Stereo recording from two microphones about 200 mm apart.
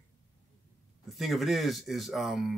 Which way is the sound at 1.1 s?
Centre (ahead or behind).